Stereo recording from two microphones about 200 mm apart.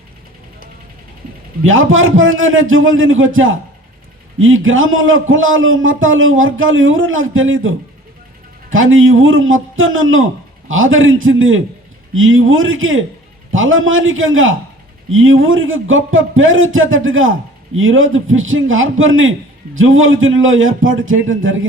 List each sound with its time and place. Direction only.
1.6 s a man's voice: 80° right